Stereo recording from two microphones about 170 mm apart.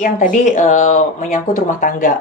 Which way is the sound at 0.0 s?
50° left (ahead or behind).